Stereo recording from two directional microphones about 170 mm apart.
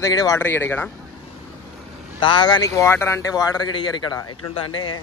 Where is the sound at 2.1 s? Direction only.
25° left (ahead or behind).